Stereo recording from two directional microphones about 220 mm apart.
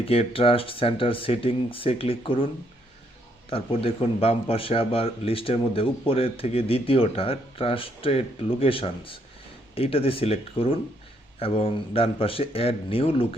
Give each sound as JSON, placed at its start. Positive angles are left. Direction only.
{"t": 0.0, "sound": "speech", "side_deg": 25}
{"t": 3.5, "sound": "speech", "side_deg": 25}